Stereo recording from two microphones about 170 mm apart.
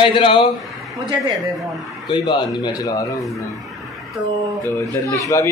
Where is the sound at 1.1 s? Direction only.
25° right (ahead or behind).